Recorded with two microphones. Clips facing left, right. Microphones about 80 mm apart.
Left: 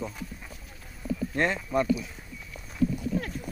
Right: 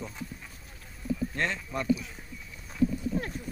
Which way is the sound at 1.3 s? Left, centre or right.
Centre.